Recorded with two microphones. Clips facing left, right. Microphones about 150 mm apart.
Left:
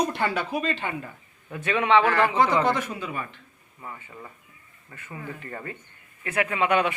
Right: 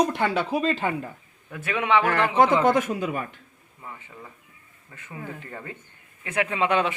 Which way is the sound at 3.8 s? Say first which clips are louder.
Left 1 dB; centre (ahead or behind).